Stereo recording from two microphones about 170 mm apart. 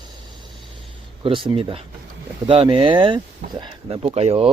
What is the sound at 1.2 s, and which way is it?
Speech, 30° right (ahead or behind).